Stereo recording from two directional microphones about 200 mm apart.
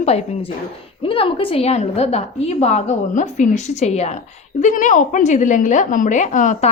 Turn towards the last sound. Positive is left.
turn(degrees=40)  # may be behind; listen again after turning